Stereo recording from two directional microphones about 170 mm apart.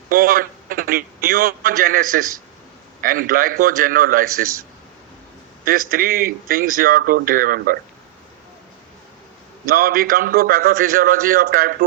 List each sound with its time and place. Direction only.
0.1 s a man's voice: 55° right (ahead or behind)
5.6 s a man's voice: 55° right (ahead or behind)
9.6 s a man's voice: 60° right (ahead or behind)